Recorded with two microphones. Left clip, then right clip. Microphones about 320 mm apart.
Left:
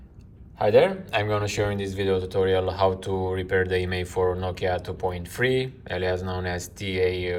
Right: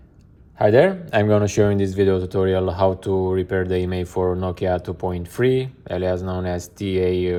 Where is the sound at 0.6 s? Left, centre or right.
Right.